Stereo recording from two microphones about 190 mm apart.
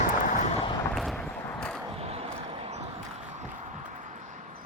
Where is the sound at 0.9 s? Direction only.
5° left (ahead or behind).